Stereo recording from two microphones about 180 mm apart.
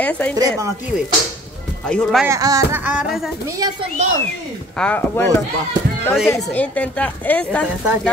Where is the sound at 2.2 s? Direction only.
20° right (ahead or behind).